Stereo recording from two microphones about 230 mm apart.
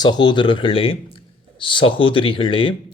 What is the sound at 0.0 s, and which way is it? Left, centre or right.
A man's voice, centre.